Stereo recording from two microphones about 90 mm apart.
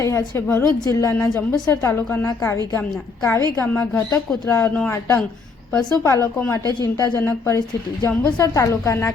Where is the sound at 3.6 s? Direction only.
20° left (ahead or behind).